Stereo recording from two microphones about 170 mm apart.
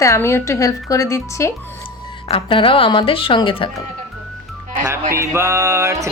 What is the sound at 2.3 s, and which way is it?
A woman's voice, 30° left (ahead or behind).